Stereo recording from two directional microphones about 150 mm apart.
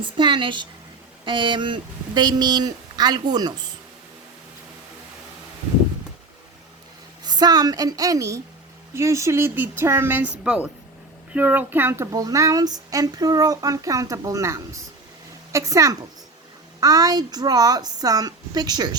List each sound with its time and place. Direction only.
0.0 s a woman's voice: 30° right (ahead or behind)
7.3 s a woman's voice: 25° right (ahead or behind)